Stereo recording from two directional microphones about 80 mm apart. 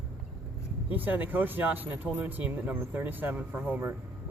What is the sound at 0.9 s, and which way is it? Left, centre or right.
Speech, right.